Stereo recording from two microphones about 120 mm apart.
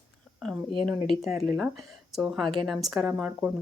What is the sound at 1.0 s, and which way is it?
Speech, centre (ahead or behind).